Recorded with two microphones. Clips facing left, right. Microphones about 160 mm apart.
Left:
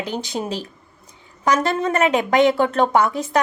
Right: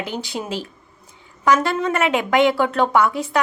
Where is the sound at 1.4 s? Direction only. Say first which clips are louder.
Right 1 dB; 40° left (ahead or behind).